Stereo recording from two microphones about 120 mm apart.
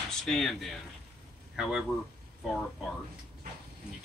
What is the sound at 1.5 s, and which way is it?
Speech, 5° right (ahead or behind).